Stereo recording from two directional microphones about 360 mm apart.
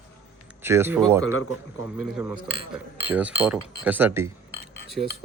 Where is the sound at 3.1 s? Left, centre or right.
Centre.